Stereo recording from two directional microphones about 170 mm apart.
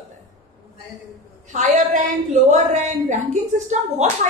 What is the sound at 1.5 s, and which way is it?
A woman's voice, 45° right (ahead or behind).